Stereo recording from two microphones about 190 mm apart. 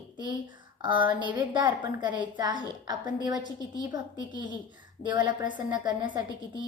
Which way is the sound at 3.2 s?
20° right (ahead or behind).